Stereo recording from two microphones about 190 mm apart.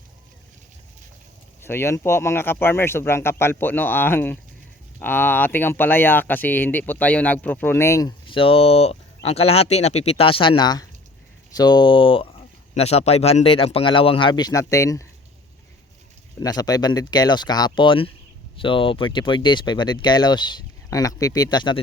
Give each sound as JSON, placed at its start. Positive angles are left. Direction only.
{"t": 1.6, "sound": "speech", "side_deg": 15}
{"t": 16.4, "sound": "speech", "side_deg": 20}